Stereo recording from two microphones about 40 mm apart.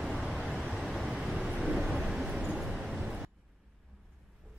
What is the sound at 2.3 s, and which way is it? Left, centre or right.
Vehicle, right.